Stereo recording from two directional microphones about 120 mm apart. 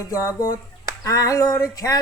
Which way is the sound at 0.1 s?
30° left (ahead or behind).